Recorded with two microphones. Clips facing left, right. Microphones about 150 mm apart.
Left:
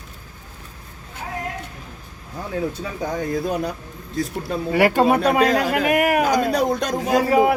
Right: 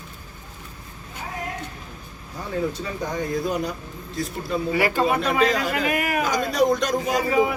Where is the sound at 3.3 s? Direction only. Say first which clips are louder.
Left 1 dB; 55° left (ahead or behind).